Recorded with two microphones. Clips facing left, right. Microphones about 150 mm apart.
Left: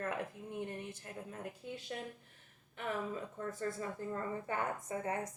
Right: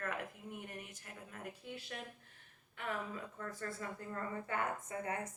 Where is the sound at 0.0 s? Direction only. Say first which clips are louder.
Left 3 dB; 25° left (ahead or behind).